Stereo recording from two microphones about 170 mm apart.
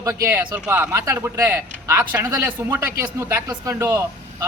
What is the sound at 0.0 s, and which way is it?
A man's voice, 15° right (ahead or behind).